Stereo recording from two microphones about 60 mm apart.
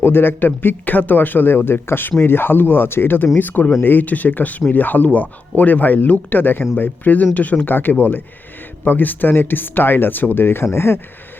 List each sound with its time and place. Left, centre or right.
0.0 s speech: left